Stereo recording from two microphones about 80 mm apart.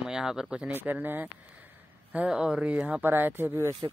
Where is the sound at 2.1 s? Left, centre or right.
Centre; by 3.7 s right.